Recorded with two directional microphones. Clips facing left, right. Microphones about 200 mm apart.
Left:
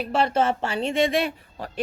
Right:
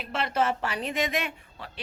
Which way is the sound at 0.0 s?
35° left (ahead or behind).